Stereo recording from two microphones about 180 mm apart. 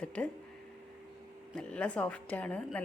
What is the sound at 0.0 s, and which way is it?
Speech, 5° left (ahead or behind).